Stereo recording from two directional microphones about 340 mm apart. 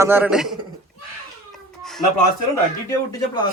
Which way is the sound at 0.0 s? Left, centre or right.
Centre.